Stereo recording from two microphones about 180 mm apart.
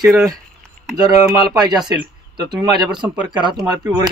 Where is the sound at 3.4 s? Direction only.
25° right (ahead or behind).